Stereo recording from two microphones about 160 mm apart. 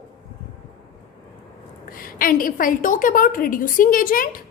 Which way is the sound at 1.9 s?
60° left (ahead or behind).